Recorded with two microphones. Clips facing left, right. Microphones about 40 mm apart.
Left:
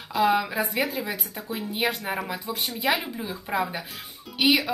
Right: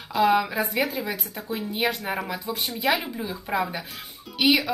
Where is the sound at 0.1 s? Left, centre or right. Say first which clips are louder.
Right 2 dB; centre.